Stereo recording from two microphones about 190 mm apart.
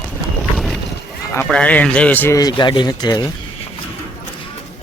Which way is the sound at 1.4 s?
5° left (ahead or behind).